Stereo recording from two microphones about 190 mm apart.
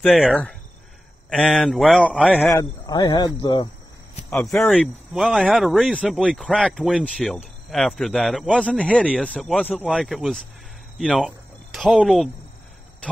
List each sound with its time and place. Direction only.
0.0 s speech: centre (ahead or behind)
2.5 s speech: 20° left (ahead or behind)
4.3 s speech: 10° left (ahead or behind)
4.6 s speech: centre (ahead or behind)